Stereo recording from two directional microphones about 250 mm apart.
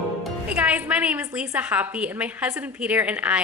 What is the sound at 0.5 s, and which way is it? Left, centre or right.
A woman's voice, centre.